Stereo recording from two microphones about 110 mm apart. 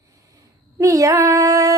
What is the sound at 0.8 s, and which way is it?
Child singing, 30° right (ahead or behind).